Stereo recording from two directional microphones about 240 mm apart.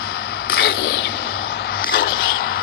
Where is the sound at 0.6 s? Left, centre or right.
Left.